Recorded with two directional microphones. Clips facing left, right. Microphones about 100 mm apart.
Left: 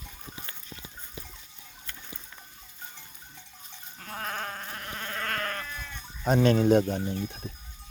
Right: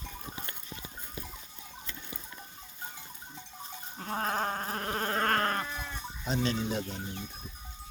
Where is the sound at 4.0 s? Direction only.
30° right (ahead or behind).